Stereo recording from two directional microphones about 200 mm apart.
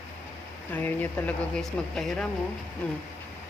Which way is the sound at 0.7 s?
10° left (ahead or behind).